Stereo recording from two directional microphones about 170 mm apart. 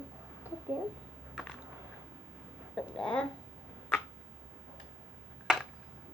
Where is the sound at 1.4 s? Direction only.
Centre (ahead or behind).